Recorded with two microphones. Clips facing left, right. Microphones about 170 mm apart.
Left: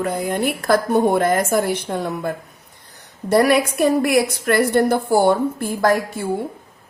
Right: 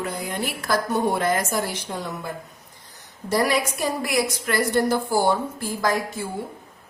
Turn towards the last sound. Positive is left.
turn(degrees=55)  # may be behind; listen again after turning